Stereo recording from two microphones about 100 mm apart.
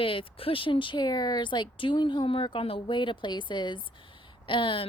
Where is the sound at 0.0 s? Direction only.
65° left (ahead or behind).